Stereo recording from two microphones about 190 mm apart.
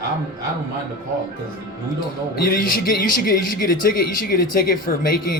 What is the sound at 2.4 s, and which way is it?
Speech, 50° left (ahead or behind).